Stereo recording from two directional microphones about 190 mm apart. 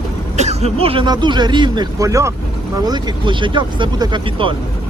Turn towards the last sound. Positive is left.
turn(degrees=-25)  # may be behind; listen again after turning